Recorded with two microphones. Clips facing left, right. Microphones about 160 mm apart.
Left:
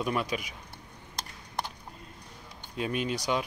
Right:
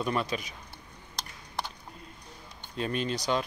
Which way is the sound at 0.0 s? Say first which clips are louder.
Even; 10° left (ahead or behind).